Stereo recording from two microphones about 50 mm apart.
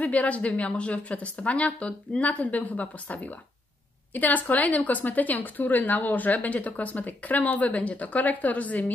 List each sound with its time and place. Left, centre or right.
0.0 s a woman's voice: left